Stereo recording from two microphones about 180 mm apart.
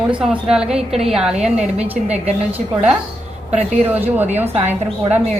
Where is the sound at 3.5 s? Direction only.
10° right (ahead or behind).